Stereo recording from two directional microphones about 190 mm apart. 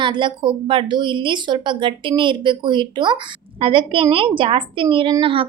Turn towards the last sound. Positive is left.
turn(degrees=-25)  # may be behind; listen again after turning